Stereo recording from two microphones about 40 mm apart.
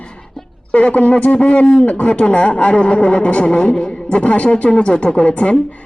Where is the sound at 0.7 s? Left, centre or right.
Left.